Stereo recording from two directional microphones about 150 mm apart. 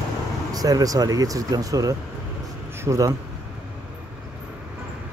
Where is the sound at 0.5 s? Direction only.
25° right (ahead or behind).